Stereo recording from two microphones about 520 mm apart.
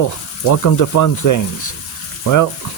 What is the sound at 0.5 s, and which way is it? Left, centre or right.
Speech, left.